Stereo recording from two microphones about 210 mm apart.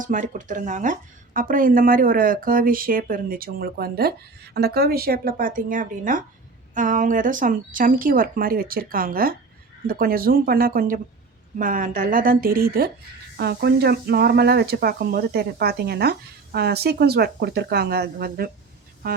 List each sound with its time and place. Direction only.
0.0 s speech: 40° right (ahead or behind)